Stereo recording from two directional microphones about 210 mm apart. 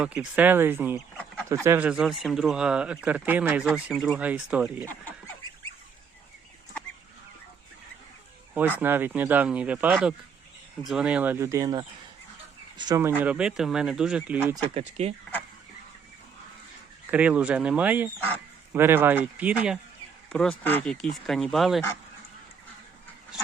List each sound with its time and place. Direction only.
0.0 s speech: 5° right (ahead or behind)
1.1 s chicken: 5° left (ahead or behind)
1.6 s speech: 10° right (ahead or behind)
4.8 s speech: 10° left (ahead or behind)
8.8 s speech: 10° right (ahead or behind)
14.5 s speech: 25° right (ahead or behind)
17.1 s speech: 5° right (ahead or behind)